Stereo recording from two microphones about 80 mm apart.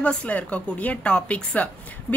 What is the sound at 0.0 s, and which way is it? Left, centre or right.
A woman's voice, centre.